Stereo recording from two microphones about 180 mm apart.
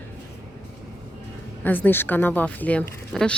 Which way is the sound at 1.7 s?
10° left (ahead or behind).